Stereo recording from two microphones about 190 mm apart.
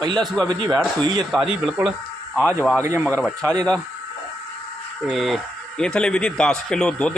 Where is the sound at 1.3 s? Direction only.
5° right (ahead or behind).